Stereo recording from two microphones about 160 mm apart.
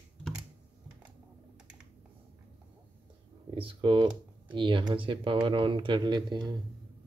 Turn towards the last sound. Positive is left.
turn(degrees=-30)  # may be behind; listen again after turning